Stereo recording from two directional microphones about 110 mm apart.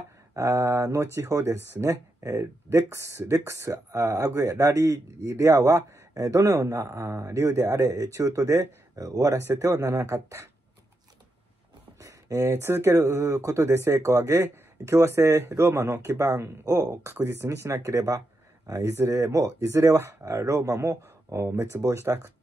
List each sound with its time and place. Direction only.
0.4 s speech: 30° right (ahead or behind)
12.0 s speech: 30° right (ahead or behind)